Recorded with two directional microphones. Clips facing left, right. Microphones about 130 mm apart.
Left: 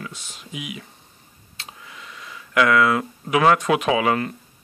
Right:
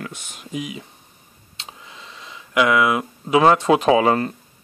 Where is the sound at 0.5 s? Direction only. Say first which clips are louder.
Right 5 dB; 35° right (ahead or behind).